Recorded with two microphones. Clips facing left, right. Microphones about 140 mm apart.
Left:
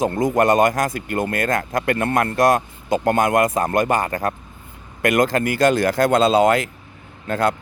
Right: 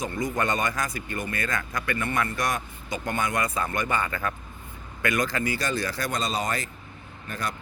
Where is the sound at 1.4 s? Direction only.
50° left (ahead or behind).